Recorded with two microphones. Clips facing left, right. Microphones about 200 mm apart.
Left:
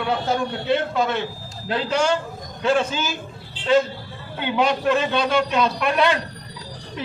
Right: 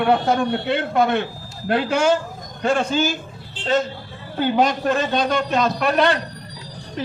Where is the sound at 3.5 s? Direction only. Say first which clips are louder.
Left 3 dB; 45° right (ahead or behind).